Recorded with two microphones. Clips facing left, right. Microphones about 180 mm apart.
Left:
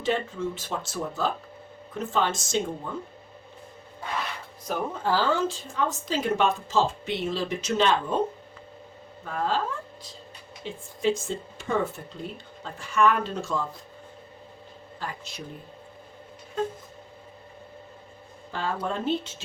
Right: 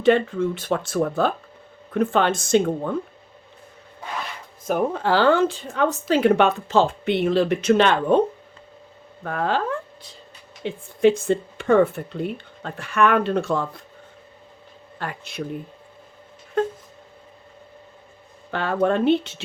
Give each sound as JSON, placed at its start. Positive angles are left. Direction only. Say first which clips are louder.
{"t": 0.0, "sound": "a woman's voice", "louder": "right 9 dB", "side_deg": -60}
{"t": 4.6, "sound": "a woman's voice", "louder": "right 7 dB", "side_deg": -60}
{"t": 9.2, "sound": "a woman's voice", "louder": "right 4 dB", "side_deg": -65}
{"t": 14.9, "sound": "a woman's voice", "louder": "right 6 dB", "side_deg": -60}
{"t": 18.5, "sound": "speech", "louder": "right 9 dB", "side_deg": -65}